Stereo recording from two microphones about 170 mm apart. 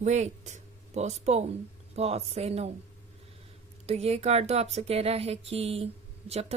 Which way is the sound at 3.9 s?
40° right (ahead or behind).